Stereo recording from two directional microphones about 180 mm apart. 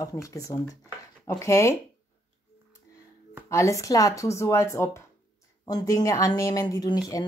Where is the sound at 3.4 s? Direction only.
15° left (ahead or behind).